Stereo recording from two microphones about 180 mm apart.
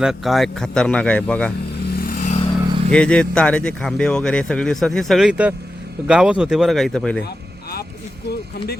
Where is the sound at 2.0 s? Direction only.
50° left (ahead or behind).